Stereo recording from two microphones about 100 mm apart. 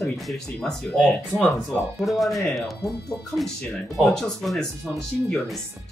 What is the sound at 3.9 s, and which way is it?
Speech, centre (ahead or behind).